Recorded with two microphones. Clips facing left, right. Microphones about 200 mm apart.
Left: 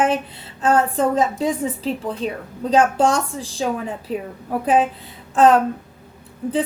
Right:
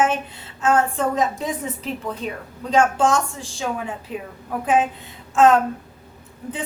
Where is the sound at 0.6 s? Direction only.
35° left (ahead or behind).